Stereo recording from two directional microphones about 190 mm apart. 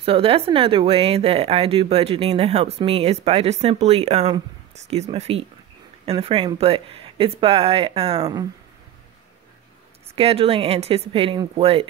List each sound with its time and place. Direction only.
0.0 s speech: 30° right (ahead or behind)
8.2 s speech: 20° right (ahead or behind)
10.1 s speech: 30° right (ahead or behind)